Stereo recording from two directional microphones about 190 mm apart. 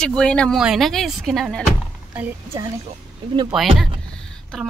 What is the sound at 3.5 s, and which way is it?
Speech, centre (ahead or behind).